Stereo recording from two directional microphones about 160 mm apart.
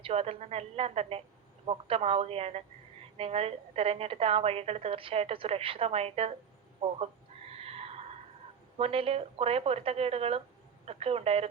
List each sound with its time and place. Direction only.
0.0 s a woman's voice: 40° right (ahead or behind)
6.8 s neigh: 35° right (ahead or behind)
8.8 s a woman's voice: 35° right (ahead or behind)